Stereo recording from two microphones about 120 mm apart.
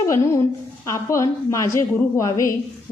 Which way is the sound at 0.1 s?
25° left (ahead or behind).